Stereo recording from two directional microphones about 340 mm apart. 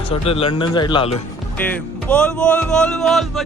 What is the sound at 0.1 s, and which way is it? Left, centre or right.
Speech, centre.